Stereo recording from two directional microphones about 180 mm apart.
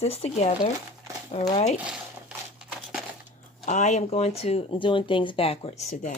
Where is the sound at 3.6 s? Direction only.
40° left (ahead or behind).